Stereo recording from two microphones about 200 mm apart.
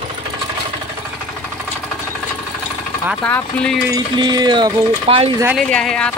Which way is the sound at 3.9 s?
20° right (ahead or behind).